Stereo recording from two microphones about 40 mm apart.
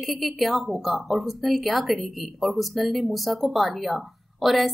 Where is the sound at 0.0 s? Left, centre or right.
Centre.